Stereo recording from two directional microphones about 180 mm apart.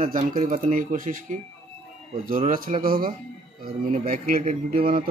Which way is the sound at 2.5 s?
50° right (ahead or behind).